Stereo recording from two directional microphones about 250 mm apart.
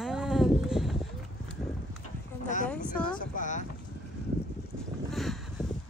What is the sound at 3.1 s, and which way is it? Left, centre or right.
Boat, left.